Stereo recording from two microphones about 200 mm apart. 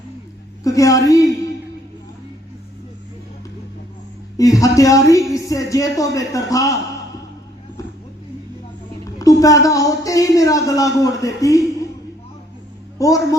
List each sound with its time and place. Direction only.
0.6 s speech: 15° left (ahead or behind)
4.4 s speech: 15° left (ahead or behind)
9.1 s speech: 15° left (ahead or behind)
13.0 s speech: 15° left (ahead or behind)